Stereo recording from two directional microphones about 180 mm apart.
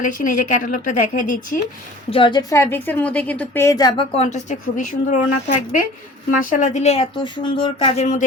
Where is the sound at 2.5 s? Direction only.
15° left (ahead or behind).